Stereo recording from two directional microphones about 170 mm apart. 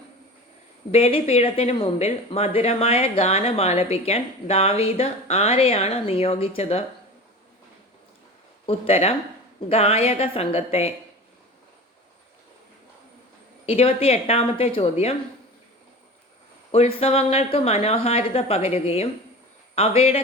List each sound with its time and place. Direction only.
0.9 s speech: 35° left (ahead or behind)
8.6 s speech: 35° left (ahead or behind)
13.7 s speech: 35° left (ahead or behind)
16.7 s speech: 40° left (ahead or behind)